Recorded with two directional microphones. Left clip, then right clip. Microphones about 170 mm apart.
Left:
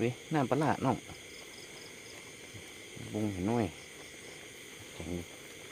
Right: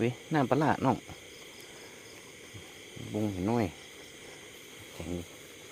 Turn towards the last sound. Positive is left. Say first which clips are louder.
# right 2 dB
turn(degrees=-40)  # may be behind; listen again after turning